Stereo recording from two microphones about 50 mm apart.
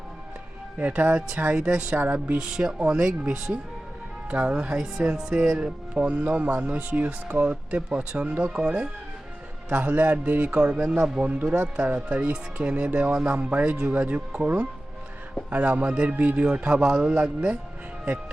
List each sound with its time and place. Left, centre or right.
0.8 s speech: right
1.9 s speech: right
2.4 s speech: centre
4.7 s speech: centre; by 7.5 s right
7.5 s speech: right